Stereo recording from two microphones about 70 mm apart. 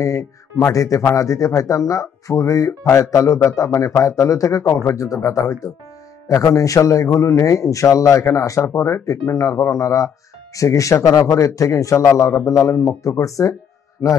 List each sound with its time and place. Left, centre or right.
0.7 s a man's voice: left